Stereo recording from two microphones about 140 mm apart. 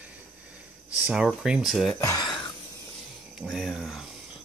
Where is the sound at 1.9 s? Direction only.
25° left (ahead or behind).